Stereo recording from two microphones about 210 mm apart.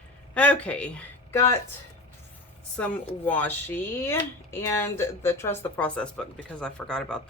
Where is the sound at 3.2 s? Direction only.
10° left (ahead or behind).